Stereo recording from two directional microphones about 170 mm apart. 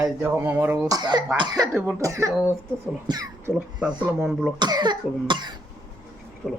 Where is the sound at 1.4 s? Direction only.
25° right (ahead or behind).